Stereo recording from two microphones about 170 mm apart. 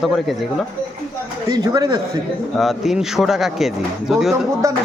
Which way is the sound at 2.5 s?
Centre (ahead or behind).